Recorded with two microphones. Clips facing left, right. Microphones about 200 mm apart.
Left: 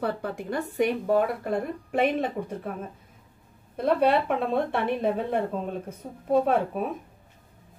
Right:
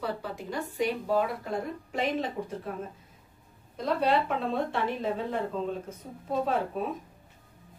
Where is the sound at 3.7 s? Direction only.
60° left (ahead or behind).